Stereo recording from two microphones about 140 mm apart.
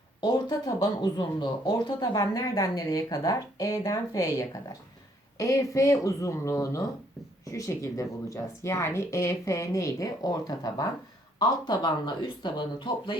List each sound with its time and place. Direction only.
0.2 s speech: 30° left (ahead or behind)